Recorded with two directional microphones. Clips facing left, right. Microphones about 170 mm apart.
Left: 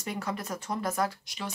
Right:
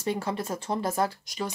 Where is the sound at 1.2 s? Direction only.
40° right (ahead or behind).